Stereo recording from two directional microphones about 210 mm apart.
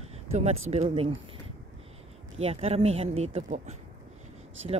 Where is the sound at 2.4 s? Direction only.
30° right (ahead or behind).